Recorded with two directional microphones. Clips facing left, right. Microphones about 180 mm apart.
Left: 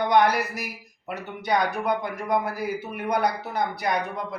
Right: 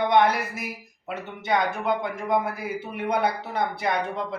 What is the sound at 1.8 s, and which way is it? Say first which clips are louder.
Speech: even; 25° right (ahead or behind).